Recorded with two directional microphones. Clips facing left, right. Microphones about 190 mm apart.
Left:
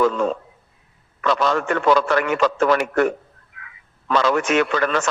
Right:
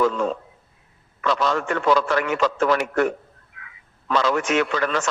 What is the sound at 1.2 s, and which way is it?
A man's voice, 60° left (ahead or behind).